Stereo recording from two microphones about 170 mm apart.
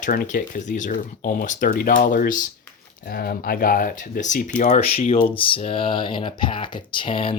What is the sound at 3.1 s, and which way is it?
Speech, 60° left (ahead or behind).